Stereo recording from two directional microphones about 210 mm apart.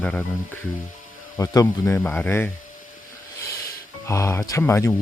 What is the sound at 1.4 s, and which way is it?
Speech, 15° left (ahead or behind).